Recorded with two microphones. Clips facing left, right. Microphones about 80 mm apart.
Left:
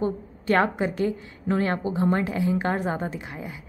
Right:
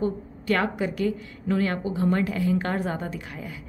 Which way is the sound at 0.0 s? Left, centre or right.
Left.